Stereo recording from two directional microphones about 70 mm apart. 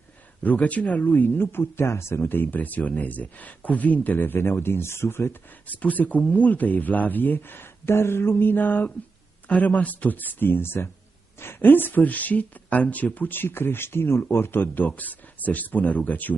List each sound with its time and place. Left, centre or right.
0.4 s speech: left
5.8 s speech: left